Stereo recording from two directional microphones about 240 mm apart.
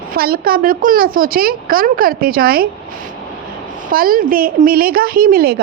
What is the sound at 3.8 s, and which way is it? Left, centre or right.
A woman's voice, right.